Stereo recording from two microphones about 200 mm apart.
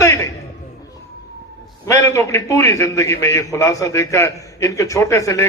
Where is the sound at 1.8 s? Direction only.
15° left (ahead or behind).